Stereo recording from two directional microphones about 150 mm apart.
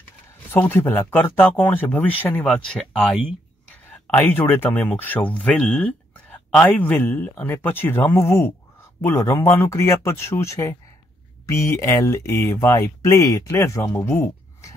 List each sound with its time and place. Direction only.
0.5 s speech: 15° left (ahead or behind)
4.3 s speech: 15° left (ahead or behind)